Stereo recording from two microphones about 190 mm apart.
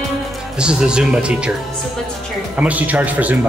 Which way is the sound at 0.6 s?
5° right (ahead or behind).